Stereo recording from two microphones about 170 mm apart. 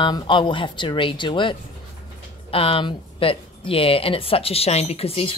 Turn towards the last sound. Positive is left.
turn(degrees=35)  # may be behind; listen again after turning